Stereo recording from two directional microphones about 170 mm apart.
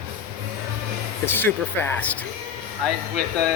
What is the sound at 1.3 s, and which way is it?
Speech, 10° left (ahead or behind).